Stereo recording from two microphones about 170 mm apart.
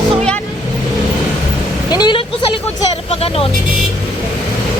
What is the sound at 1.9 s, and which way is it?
Vehicle, 25° left (ahead or behind).